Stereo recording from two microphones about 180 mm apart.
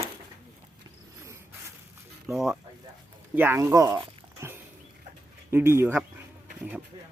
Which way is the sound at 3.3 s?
10° right (ahead or behind).